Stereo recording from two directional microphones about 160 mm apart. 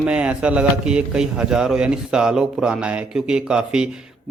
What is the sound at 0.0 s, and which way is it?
A man's voice, 10° right (ahead or behind).